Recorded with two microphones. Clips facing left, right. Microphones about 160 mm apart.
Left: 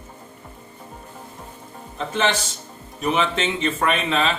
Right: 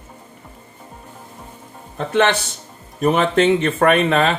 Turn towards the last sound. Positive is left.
turn(degrees=-55)  # may be behind; listen again after turning